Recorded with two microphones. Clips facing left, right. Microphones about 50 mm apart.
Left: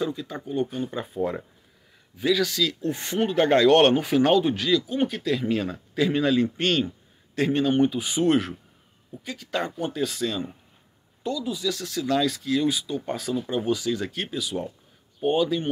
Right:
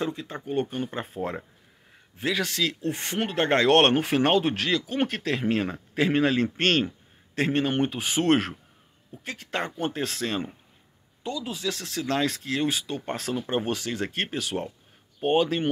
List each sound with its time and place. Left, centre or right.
0.0 s speech: right
4.9 s speech: right
5.3 s speech: right
9.2 s speech: right
9.8 s speech: right
15.2 s speech: right